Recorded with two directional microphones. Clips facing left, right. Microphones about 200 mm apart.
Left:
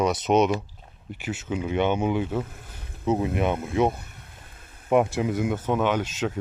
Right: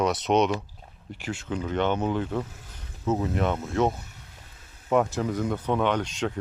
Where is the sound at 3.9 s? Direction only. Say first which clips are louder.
Left 1 dB; 55° left (ahead or behind).